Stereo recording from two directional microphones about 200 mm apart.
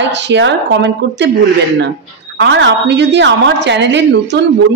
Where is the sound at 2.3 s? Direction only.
60° right (ahead or behind).